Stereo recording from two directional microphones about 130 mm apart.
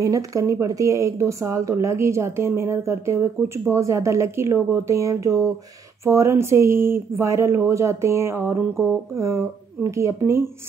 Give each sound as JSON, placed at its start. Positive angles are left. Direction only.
{"t": 0.0, "sound": "speech", "side_deg": -25}